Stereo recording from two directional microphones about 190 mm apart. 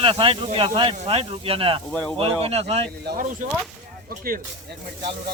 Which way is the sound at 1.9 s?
5° left (ahead or behind).